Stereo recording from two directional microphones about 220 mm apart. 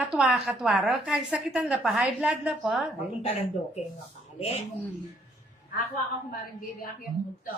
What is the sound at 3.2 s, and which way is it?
Speech, 30° left (ahead or behind).